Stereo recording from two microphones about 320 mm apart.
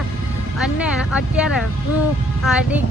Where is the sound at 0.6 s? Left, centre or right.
Centre.